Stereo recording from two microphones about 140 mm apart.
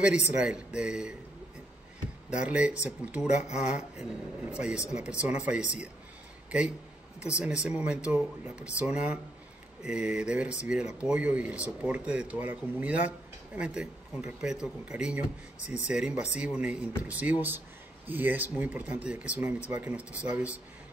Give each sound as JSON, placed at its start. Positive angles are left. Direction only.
{"t": 0.0, "sound": "speech", "side_deg": -5}
{"t": 2.3, "sound": "speech", "side_deg": -10}
{"t": 7.2, "sound": "speech", "side_deg": -10}